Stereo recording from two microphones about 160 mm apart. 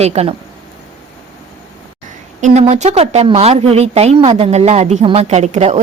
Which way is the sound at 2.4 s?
45° right (ahead or behind).